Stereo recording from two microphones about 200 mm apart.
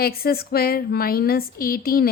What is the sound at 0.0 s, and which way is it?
A woman's voice, 50° left (ahead or behind).